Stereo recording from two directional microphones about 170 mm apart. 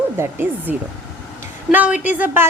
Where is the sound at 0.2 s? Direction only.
10° right (ahead or behind).